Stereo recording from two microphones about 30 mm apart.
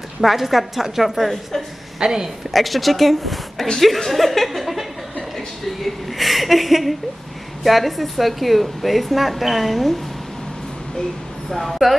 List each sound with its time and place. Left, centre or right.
0.2 s a woman's voice: centre
2.0 s a woman's voice: centre
2.5 s a woman's voice: centre
11.5 s a woman's voice: centre